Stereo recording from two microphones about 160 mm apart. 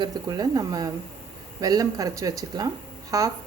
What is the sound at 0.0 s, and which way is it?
Speech, 25° right (ahead or behind).